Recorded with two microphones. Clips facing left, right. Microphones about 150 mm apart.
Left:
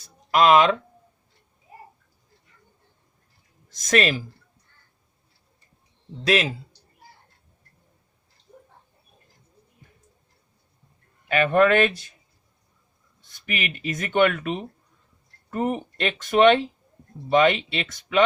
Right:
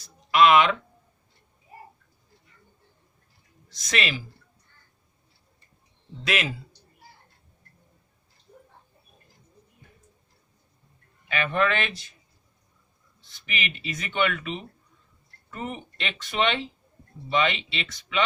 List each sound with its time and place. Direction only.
0.0 s a sound: 40° left (ahead or behind)
3.7 s speech: 45° left (ahead or behind)
6.2 s speech: 30° left (ahead or behind)
11.5 s speech: 50° left (ahead or behind)
13.2 s speech: 50° left (ahead or behind)